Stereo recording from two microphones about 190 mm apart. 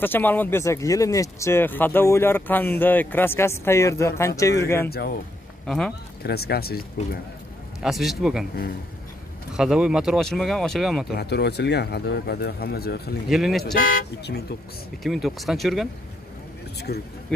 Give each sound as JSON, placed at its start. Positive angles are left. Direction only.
{"t": 0.0, "sound": "speech", "side_deg": 10}
{"t": 4.8, "sound": "speech", "side_deg": 55}
{"t": 5.7, "sound": "speech", "side_deg": 0}
{"t": 6.2, "sound": "speech", "side_deg": 55}
{"t": 7.8, "sound": "speech", "side_deg": 0}
{"t": 9.5, "sound": "speech", "side_deg": -5}
{"t": 11.1, "sound": "speech", "side_deg": 60}
{"t": 13.3, "sound": "speech", "side_deg": 0}
{"t": 13.7, "sound": "speech", "side_deg": 50}
{"t": 15.0, "sound": "speech", "side_deg": 0}